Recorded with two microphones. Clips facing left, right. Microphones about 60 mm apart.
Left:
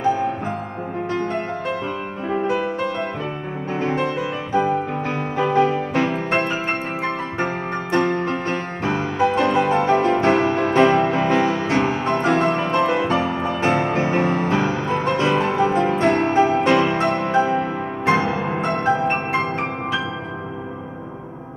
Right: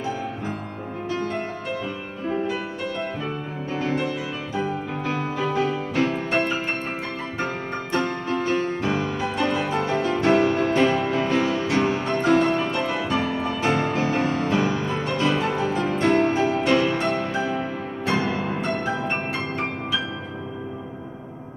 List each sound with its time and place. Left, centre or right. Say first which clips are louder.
2.2 s music: left 4 dB; left
3.7 s music: left 3 dB; left
8.1 s music: left 2 dB; left